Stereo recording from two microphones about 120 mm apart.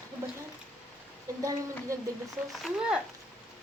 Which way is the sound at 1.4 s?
30° right (ahead or behind).